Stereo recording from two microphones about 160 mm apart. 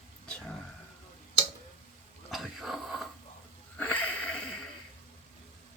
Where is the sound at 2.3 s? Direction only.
Centre (ahead or behind).